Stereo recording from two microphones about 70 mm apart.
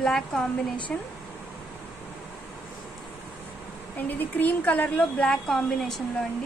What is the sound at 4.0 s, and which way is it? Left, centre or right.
A woman's voice, left.